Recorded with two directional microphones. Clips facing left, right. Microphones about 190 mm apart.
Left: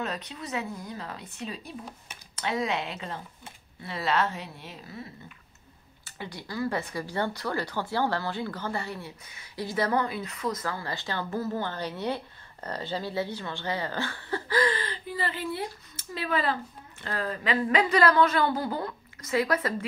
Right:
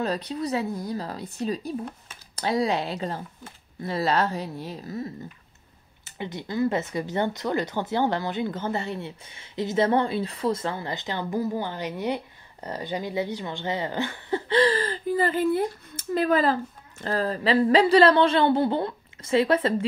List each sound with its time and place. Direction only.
0.0 s speech: 35° right (ahead or behind)
6.0 s speech: 20° right (ahead or behind)
14.8 s speech: 45° right (ahead or behind); by 19.7 s 25° right (ahead or behind)